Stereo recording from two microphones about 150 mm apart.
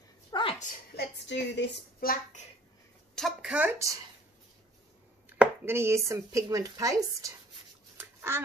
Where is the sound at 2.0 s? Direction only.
70° left (ahead or behind).